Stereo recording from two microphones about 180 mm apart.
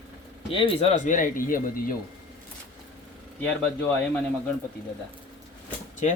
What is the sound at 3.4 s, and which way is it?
Speech, 10° left (ahead or behind).